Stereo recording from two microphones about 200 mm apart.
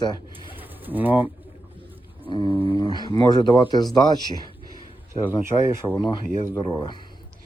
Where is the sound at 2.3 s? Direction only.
20° left (ahead or behind).